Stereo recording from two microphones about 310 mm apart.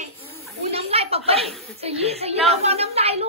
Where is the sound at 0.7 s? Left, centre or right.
Centre.